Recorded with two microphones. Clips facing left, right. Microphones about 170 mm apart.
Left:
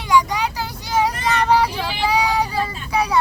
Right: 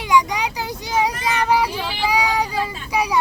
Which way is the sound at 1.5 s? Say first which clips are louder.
Left 2 dB; 5° right (ahead or behind).